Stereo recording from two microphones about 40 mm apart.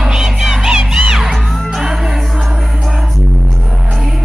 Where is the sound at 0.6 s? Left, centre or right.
Centre.